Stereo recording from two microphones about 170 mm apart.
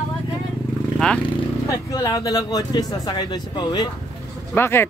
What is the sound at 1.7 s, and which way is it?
Speech, 20° left (ahead or behind).